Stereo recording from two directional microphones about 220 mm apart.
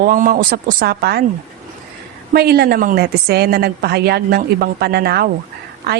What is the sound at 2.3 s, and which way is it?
A woman's voice, 45° right (ahead or behind).